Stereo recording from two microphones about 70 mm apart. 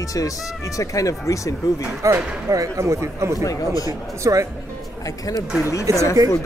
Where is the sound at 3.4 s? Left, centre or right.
Left.